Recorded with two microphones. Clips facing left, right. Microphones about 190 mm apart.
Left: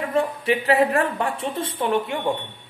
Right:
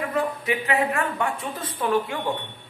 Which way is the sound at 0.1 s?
30° left (ahead or behind).